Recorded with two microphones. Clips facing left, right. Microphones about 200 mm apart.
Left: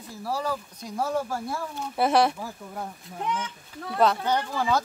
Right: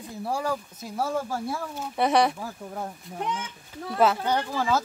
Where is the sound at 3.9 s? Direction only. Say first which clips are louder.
Even; 5° right (ahead or behind).